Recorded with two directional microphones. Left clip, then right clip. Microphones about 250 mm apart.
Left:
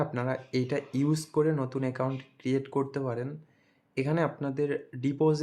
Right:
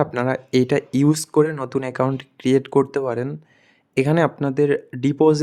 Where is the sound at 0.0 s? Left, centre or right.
Right.